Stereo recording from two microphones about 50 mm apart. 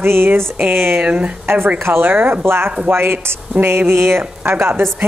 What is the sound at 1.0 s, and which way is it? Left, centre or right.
Speech, right.